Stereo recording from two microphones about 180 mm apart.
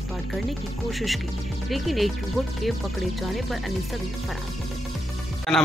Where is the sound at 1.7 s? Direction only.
Centre (ahead or behind).